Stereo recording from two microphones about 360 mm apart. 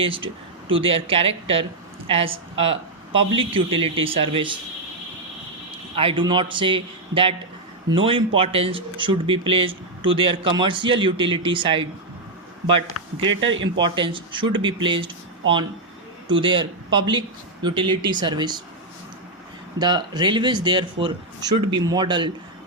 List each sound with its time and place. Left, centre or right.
0.0 s speech: centre
6.0 s a man's voice: centre
13.4 s speech: right
13.7 s speech: centre
19.8 s speech: centre